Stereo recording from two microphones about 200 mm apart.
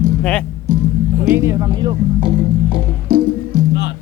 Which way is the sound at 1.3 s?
15° right (ahead or behind).